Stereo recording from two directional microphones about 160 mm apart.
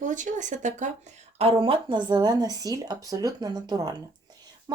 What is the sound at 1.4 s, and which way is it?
Speech, 35° right (ahead or behind).